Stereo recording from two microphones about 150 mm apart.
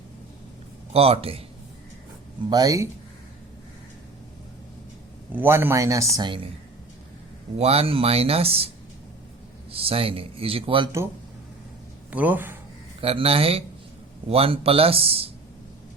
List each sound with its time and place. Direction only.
0.9 s speech: 40° right (ahead or behind)
2.5 s speech: 25° right (ahead or behind)
5.3 s speech: 15° right (ahead or behind); by 6.5 s 30° right (ahead or behind)
7.6 s speech: 40° right (ahead or behind)
9.7 s speech: 40° right (ahead or behind)
12.1 s speech: 10° right (ahead or behind)
13.0 s speech: 40° right (ahead or behind)